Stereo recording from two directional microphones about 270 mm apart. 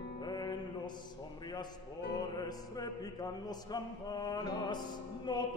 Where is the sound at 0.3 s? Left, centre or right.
Centre.